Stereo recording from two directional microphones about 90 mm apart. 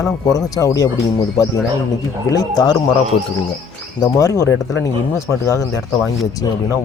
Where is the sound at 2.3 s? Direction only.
45° left (ahead or behind).